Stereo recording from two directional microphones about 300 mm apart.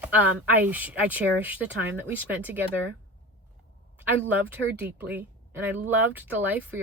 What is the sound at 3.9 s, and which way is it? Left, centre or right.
Speech, centre.